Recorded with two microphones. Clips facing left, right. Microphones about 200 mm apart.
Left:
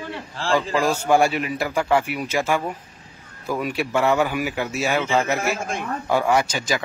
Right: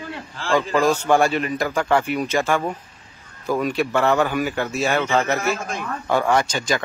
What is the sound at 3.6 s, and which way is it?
Speech, 10° left (ahead or behind).